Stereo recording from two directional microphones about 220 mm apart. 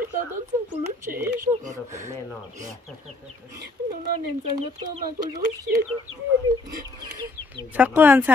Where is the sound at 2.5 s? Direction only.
35° right (ahead or behind).